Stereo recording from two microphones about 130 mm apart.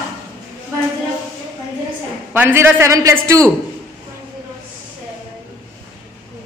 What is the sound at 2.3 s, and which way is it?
A man's voice, 15° right (ahead or behind).